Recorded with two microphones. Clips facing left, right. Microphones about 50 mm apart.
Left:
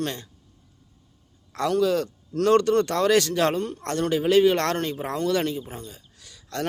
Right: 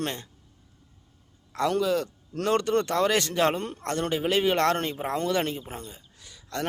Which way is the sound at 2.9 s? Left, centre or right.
Centre.